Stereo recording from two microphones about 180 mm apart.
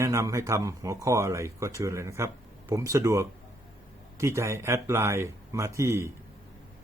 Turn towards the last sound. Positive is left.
turn(degrees=-15)  # may be behind; listen again after turning